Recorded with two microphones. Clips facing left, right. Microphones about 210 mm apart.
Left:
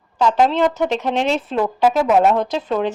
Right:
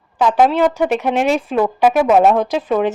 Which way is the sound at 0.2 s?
15° right (ahead or behind).